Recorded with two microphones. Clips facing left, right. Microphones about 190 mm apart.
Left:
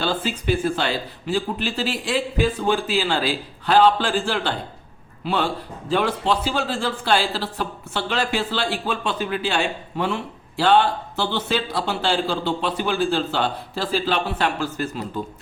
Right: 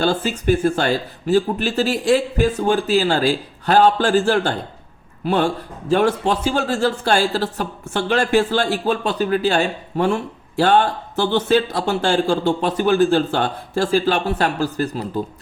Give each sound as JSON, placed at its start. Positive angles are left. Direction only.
{"t": 0.0, "sound": "a man's voice", "side_deg": -45}